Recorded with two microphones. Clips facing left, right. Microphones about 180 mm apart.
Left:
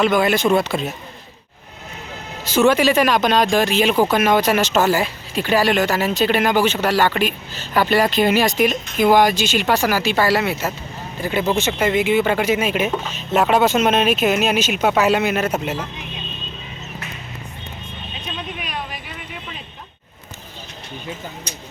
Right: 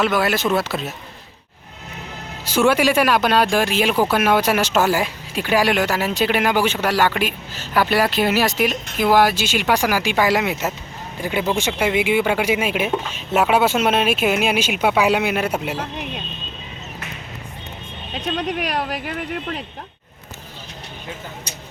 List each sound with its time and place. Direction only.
0.0 s speech: 5° right (ahead or behind)
2.4 s speech: 10° right (ahead or behind)
18.3 s speech: 75° right (ahead or behind)